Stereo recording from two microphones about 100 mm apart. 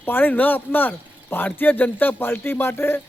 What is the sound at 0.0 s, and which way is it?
Speech, 20° left (ahead or behind).